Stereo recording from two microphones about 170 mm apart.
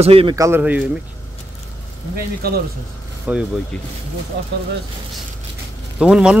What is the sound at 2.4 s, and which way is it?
Speech, 65° right (ahead or behind).